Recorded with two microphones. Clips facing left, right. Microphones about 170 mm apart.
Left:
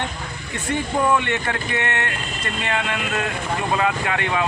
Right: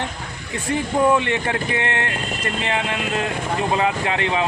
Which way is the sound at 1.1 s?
30° right (ahead or behind).